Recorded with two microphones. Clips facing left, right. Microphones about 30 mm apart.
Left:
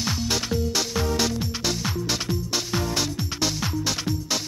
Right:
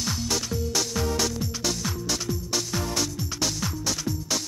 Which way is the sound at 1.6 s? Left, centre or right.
Left.